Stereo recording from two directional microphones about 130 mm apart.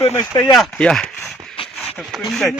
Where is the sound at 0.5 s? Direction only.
5° left (ahead or behind).